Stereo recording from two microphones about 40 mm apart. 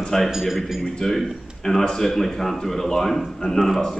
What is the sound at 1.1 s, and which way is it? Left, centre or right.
A man's voice, centre.